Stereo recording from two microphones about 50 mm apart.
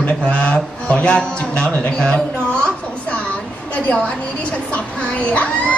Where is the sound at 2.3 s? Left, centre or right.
Left.